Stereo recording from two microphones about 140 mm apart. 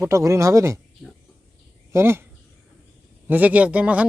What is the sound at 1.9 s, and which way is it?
Speech, 15° right (ahead or behind).